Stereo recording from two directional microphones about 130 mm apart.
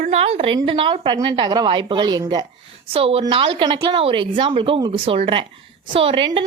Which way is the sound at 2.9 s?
45° right (ahead or behind).